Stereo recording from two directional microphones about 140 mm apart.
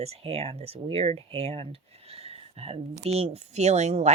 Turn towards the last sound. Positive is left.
turn(degrees=-50)  # may be behind; listen again after turning